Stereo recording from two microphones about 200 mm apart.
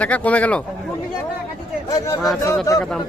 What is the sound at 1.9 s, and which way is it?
Speech, 15° left (ahead or behind).